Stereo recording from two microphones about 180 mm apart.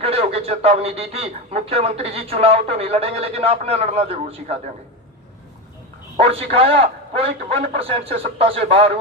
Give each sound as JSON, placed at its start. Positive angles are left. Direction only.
{"t": 0.0, "sound": "a man's voice", "side_deg": -35}
{"t": 6.1, "sound": "a man's voice", "side_deg": -35}